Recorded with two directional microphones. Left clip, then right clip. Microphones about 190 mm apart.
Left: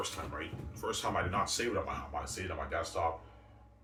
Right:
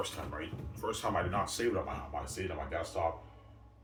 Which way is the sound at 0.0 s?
10° right (ahead or behind).